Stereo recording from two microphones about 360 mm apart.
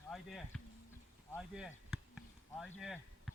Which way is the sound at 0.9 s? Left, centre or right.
Centre.